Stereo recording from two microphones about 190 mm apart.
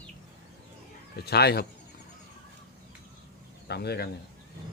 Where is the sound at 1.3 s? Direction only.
60° left (ahead or behind).